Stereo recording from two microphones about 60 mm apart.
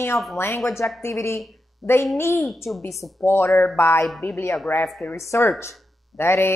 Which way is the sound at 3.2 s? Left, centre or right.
Left.